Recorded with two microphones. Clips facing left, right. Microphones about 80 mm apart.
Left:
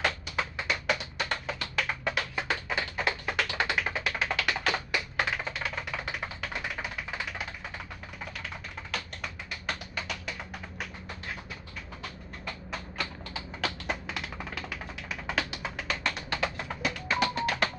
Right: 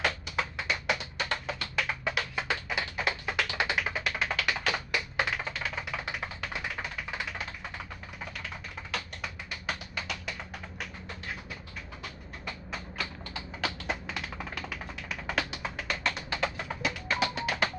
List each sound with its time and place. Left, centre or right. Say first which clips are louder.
0.0 s tap: even; centre
8.9 s tap: even; centre
12.4 s tap: left 1 dB; centre